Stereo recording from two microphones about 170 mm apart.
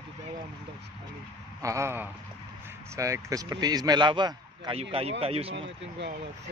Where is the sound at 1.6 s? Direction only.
20° right (ahead or behind); by 5.7 s 35° right (ahead or behind).